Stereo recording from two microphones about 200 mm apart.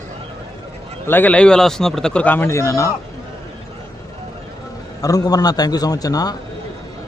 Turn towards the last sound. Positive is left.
turn(degrees=20)  # may be behind; listen again after turning